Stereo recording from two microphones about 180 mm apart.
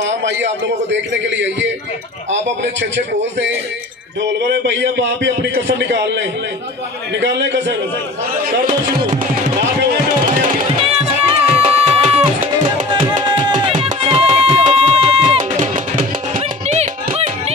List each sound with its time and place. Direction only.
0.0 s a man's voice: 80° right
4.4 s a man's voice: 75° right (ahead or behind)
11.2 s music: 30° right (ahead or behind)
13.2 s music: 25° right (ahead or behind)
15.6 s music: 45° right (ahead or behind)